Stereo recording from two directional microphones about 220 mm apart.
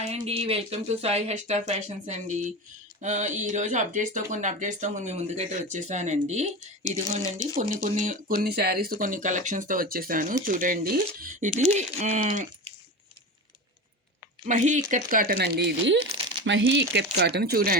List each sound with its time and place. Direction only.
0.0 s speech: 30° right (ahead or behind)
7.5 s speech: 35° right (ahead or behind)
14.4 s speech: 35° right (ahead or behind)